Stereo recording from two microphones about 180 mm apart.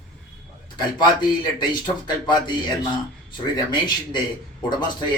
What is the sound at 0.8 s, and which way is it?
A man's voice, 25° left (ahead or behind).